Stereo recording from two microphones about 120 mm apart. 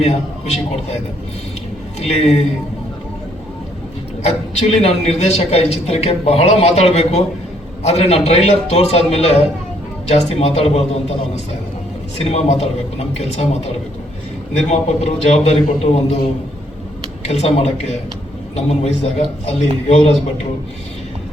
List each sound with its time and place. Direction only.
0.0 s a woman's voice: 60° left (ahead or behind)
2.0 s a woman's voice: 60° left (ahead or behind)
4.2 s a woman's voice: 60° left (ahead or behind)
12.2 s a woman's voice: 60° left (ahead or behind)
14.7 s a woman's voice: 65° left (ahead or behind)